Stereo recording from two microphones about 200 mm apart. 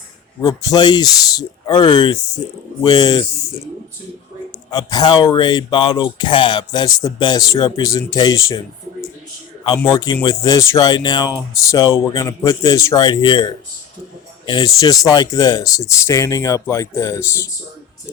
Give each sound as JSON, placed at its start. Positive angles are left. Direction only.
{"t": 0.4, "sound": "speech", "side_deg": 20}
{"t": 4.7, "sound": "speech", "side_deg": 20}
{"t": 9.6, "sound": "speech", "side_deg": 20}